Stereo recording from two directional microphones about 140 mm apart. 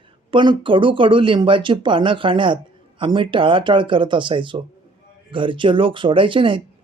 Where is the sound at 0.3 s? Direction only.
35° right (ahead or behind).